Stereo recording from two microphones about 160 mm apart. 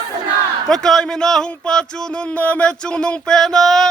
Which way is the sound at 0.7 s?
5° left (ahead or behind).